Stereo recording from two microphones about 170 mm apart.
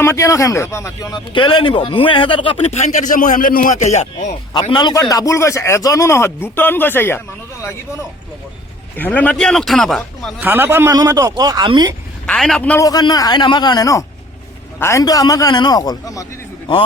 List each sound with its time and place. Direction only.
0.0 s speech: 15° left (ahead or behind); by 4.3 s 40° left (ahead or behind)
4.7 s speech: 25° left (ahead or behind)
9.0 s speech: 10° left (ahead or behind)
10.4 s a man's voice: 10° right (ahead or behind)
12.2 s speech: 5° left (ahead or behind)
12.8 s speech: 25° left (ahead or behind)